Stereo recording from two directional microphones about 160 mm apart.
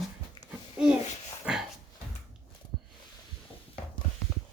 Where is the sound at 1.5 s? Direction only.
5° right (ahead or behind).